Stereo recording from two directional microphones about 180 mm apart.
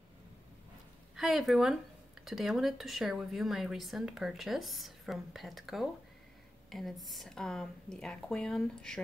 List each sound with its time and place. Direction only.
1.1 s a woman's voice: centre (ahead or behind)